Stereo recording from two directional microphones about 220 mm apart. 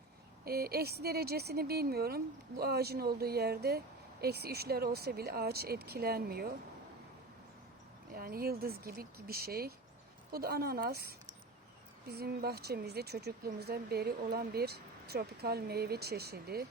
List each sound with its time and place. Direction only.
0.4 s speech: 45° right (ahead or behind)
8.1 s speech: 40° right (ahead or behind)